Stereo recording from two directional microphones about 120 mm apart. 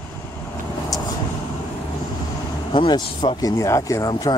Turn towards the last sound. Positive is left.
turn(degrees=30)  # may be behind; listen again after turning